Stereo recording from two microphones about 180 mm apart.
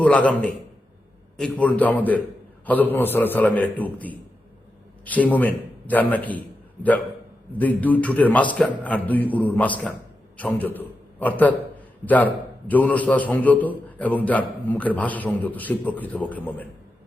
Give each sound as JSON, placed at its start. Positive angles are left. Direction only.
{"t": 0.0, "sound": "a man's voice", "side_deg": 5}
{"t": 7.6, "sound": "a man's voice", "side_deg": 10}